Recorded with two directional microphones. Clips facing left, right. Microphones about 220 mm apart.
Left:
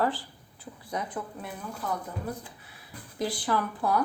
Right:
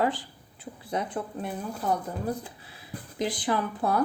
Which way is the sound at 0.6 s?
25° right (ahead or behind).